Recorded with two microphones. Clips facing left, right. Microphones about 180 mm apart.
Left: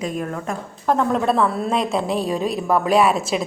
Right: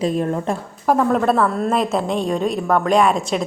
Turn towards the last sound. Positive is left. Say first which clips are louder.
# right 1 dB
turn(degrees=5)  # may be behind; listen again after turning